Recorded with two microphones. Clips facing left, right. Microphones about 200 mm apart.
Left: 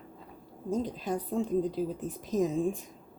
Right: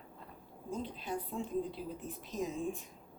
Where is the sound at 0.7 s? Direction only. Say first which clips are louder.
Left 8 dB; 45° left (ahead or behind).